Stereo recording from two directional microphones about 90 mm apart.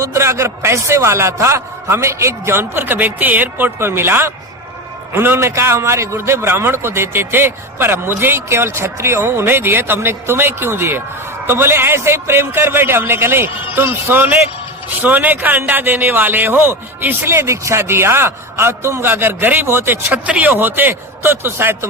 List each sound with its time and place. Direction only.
0.0 s a man's voice: 30° right (ahead or behind)